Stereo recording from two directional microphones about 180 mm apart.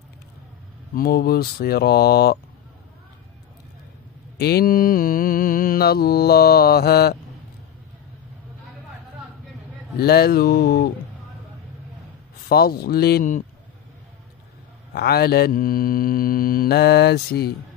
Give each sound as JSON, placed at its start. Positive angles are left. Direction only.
{"t": 0.9, "sound": "mantra", "side_deg": 55}
{"t": 4.4, "sound": "mantra", "side_deg": 60}
{"t": 9.9, "sound": "mantra", "side_deg": 60}
{"t": 12.4, "sound": "mantra", "side_deg": 60}
{"t": 14.9, "sound": "mantra", "side_deg": 60}